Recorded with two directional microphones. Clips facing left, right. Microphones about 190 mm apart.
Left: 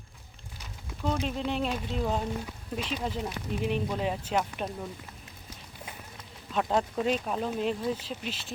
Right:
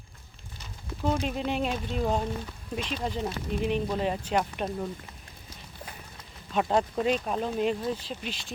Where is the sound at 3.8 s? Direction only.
Centre (ahead or behind).